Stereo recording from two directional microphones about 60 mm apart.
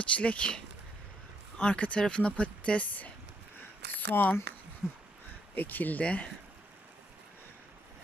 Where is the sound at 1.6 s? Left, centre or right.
Left.